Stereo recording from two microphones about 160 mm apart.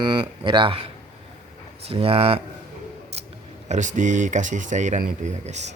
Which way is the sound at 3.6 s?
50° right (ahead or behind).